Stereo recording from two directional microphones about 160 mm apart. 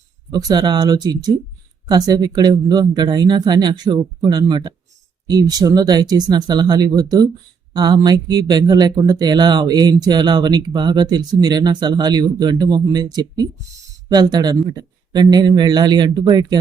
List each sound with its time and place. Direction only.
0.3 s speech: 25° right (ahead or behind)